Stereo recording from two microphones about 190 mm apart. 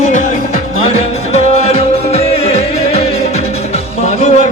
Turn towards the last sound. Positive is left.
turn(degrees=35)  # may be behind; listen again after turning